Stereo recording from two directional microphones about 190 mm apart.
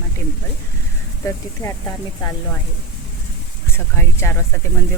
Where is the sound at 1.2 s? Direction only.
15° left (ahead or behind).